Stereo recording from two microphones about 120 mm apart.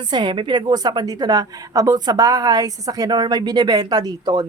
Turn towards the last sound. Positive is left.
turn(degrees=-35)  # may be behind; listen again after turning